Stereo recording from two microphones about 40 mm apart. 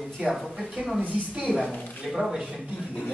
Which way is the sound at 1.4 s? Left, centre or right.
Right.